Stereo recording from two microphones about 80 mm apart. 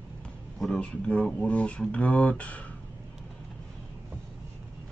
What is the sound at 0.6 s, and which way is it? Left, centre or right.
Speech, centre.